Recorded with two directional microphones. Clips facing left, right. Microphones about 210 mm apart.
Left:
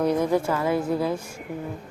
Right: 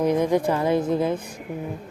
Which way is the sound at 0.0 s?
15° right (ahead or behind).